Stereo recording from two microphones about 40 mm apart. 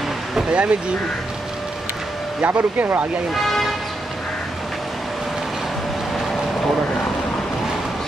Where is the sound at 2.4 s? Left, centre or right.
Right.